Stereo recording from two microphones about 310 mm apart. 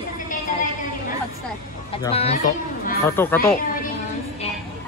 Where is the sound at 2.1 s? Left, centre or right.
Centre.